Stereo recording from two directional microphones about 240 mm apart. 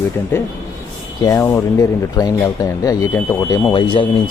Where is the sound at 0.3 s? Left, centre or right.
Centre.